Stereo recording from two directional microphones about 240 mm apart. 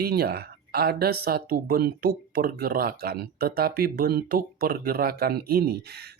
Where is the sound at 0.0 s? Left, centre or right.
Right.